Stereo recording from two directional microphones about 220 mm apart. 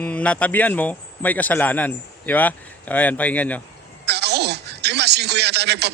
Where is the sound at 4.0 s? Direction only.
50° right (ahead or behind).